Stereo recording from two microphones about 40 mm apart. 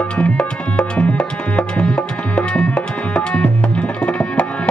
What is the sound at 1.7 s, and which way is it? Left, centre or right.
Music, left.